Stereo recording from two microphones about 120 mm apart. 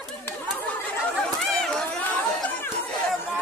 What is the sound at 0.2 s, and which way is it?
Chatter, 15° left (ahead or behind).